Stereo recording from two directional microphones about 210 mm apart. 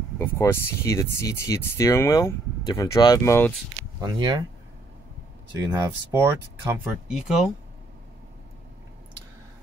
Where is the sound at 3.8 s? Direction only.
20° right (ahead or behind).